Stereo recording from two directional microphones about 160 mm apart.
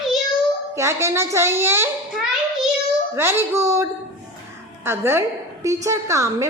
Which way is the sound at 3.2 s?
15° right (ahead or behind).